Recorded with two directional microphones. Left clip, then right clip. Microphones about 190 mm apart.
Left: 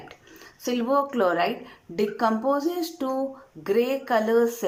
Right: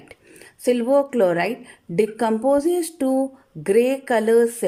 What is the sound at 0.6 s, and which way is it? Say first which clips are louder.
Speech: right 6 dB; 35° right (ahead or behind).